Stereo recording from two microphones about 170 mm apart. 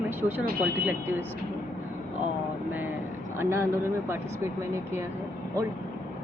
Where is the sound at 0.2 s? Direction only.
10° right (ahead or behind).